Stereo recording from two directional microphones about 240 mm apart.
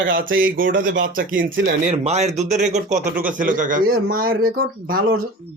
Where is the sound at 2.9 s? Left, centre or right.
Centre.